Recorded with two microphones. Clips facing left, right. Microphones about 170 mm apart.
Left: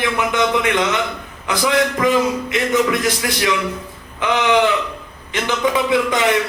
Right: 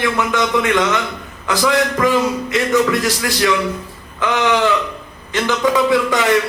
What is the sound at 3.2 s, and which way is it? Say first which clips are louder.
Speech: right 2 dB; 20° left (ahead or behind).